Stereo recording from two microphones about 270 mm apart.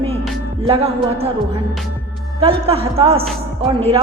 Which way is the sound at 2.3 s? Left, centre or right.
Right.